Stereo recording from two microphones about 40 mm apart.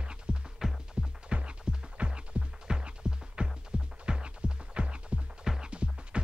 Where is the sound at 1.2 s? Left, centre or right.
Right.